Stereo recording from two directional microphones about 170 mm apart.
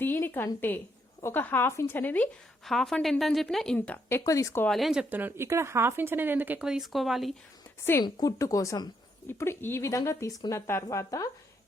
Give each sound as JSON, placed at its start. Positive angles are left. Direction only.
{"t": 0.0, "sound": "a woman's voice", "side_deg": 10}
{"t": 4.7, "sound": "speech", "side_deg": 0}
{"t": 8.0, "sound": "a woman's voice", "side_deg": 20}